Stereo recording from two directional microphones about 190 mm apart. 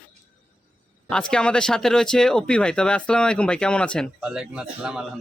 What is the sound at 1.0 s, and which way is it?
A man's voice, 5° left (ahead or behind).